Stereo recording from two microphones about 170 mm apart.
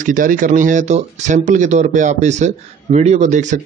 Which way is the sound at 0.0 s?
50° right (ahead or behind).